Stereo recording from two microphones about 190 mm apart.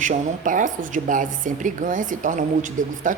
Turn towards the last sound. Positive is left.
turn(degrees=-40)  # may be behind; listen again after turning